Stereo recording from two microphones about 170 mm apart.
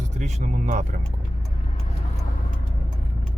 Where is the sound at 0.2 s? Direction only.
45° right (ahead or behind).